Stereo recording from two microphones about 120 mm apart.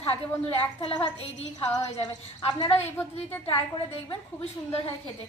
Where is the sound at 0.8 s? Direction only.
50° left (ahead or behind).